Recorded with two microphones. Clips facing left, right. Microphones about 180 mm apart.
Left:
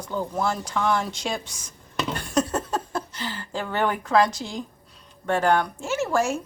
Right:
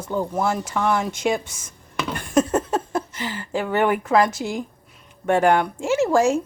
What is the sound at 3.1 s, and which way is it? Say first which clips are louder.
A woman's voice: right 5 dB; 15° right (ahead or behind).